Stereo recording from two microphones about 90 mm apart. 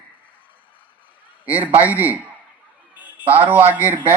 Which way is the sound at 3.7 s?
20° right (ahead or behind).